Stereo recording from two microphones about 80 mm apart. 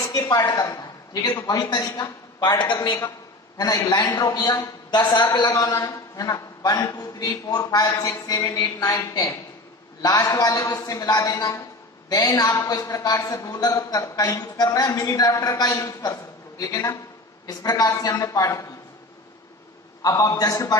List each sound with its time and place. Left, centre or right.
0.1 s a woman's voice: left
3.5 s a man's voice: left
5.9 s a man's voice: left
15.7 s a man's voice: left
16.1 s a man's voice: left
20.0 s a man's voice: left